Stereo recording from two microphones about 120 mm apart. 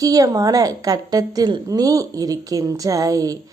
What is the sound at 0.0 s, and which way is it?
A woman's voice, 30° right (ahead or behind).